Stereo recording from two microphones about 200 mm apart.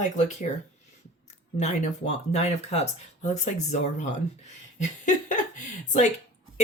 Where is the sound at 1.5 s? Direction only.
35° left (ahead or behind).